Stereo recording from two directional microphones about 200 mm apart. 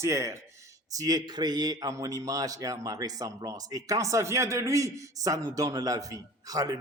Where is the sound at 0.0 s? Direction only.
15° right (ahead or behind).